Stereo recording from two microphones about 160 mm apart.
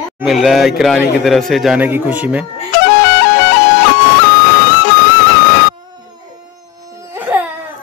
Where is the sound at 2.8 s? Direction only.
90° left.